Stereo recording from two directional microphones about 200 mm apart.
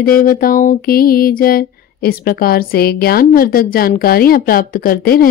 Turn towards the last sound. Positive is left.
turn(degrees=45)  # may be behind; listen again after turning